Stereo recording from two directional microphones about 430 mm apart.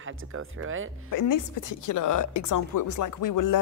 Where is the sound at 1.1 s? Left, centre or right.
Left.